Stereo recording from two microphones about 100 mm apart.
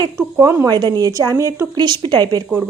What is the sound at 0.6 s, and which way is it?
Speech, 45° right (ahead or behind).